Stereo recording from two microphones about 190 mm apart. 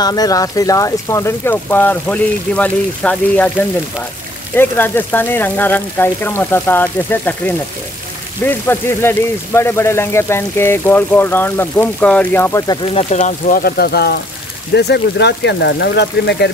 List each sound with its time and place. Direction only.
0.0 s speech: 20° left (ahead or behind)
4.6 s speech: 10° left (ahead or behind)
12.9 s speech: 40° left (ahead or behind); by 16.4 s 60° left (ahead or behind)